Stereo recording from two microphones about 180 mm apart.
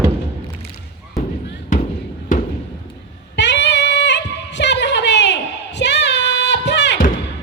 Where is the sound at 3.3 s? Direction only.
75° left (ahead or behind).